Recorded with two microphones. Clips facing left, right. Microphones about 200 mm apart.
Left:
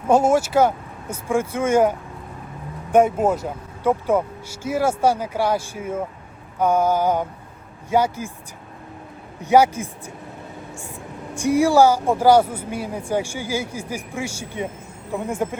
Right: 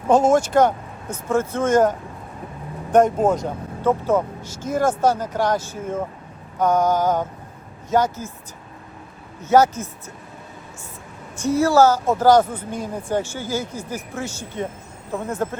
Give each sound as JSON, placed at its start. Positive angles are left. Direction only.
{"t": 0.1, "sound": "speech", "side_deg": 10}
{"t": 9.4, "sound": "speech", "side_deg": 10}
{"t": 11.3, "sound": "speech", "side_deg": 15}